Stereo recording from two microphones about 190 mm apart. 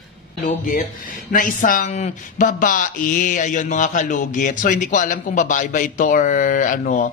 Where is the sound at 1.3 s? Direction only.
45° left (ahead or behind).